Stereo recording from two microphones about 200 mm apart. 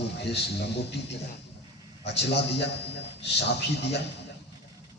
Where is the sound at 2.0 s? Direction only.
60° left (ahead or behind).